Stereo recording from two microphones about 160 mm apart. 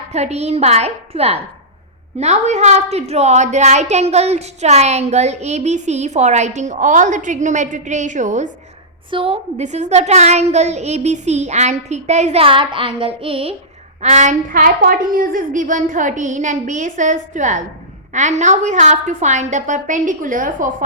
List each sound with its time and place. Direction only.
0.1 s a woman's voice: 45° right (ahead or behind)
9.0 s a woman's voice: 35° right (ahead or behind)
14.0 s a woman's voice: 45° right (ahead or behind)